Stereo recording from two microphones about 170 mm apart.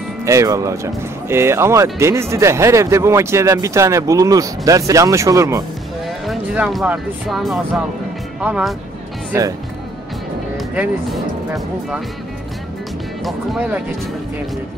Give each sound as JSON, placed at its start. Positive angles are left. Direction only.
{"t": 0.2, "sound": "speech", "side_deg": -15}
{"t": 6.0, "sound": "speech", "side_deg": -5}
{"t": 9.3, "sound": "speech", "side_deg": -15}
{"t": 10.7, "sound": "speech", "side_deg": -5}
{"t": 13.2, "sound": "speech", "side_deg": 0}